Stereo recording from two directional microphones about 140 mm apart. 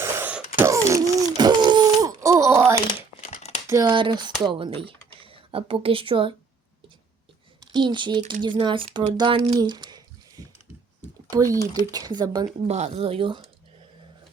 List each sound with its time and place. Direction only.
0.0 s a sound: 15° right (ahead or behind)
3.2 s crumpling: 55° left (ahead or behind)
3.7 s speech: 20° right (ahead or behind)
3.9 s speech: 35° right (ahead or behind)
7.7 s speech: 35° right (ahead or behind)
9.1 s a sound: 35° right (ahead or behind)
11.3 s speech: 25° right (ahead or behind)
12.6 s speech: 50° right (ahead or behind)